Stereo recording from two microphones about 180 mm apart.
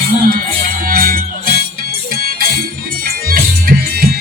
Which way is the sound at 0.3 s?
55° right (ahead or behind).